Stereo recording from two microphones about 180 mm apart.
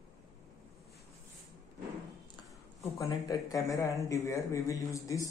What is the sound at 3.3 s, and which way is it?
Speech, 20° left (ahead or behind).